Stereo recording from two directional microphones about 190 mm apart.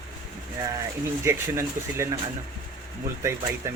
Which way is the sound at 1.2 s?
15° right (ahead or behind).